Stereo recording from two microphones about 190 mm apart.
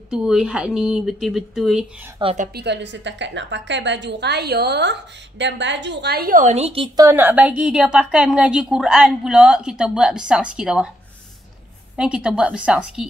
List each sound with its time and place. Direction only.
0.1 s a woman's voice: 5° right (ahead or behind)
2.3 s a woman's voice: 45° right (ahead or behind)
2.6 s a woman's voice: 65° right (ahead or behind); by 7.1 s 30° right (ahead or behind)
7.1 s a woman's voice: 10° right (ahead or behind)
12.0 s a woman's voice: 5° right (ahead or behind)